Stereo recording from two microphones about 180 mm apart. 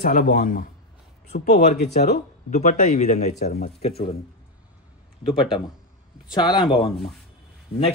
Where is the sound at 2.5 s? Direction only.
45° left (ahead or behind).